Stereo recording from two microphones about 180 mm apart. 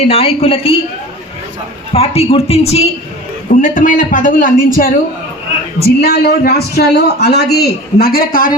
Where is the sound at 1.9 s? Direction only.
35° left (ahead or behind).